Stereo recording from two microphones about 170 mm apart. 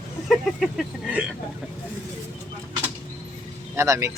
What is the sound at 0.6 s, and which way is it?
Speech, 5° right (ahead or behind).